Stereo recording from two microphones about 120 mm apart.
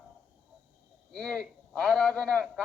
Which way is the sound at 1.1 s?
Centre (ahead or behind).